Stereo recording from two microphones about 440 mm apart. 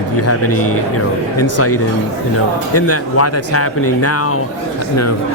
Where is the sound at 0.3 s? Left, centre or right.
Left.